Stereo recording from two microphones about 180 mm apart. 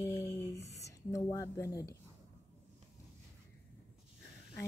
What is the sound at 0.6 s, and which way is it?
Speech, 35° left (ahead or behind).